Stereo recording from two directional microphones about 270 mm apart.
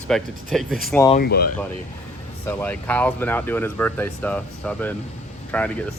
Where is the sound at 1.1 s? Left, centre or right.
Left.